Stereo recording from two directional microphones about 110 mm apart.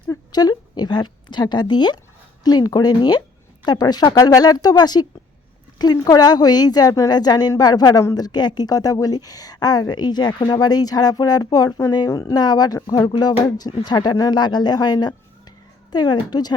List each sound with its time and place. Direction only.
0.1 s a woman's voice: 35° left (ahead or behind)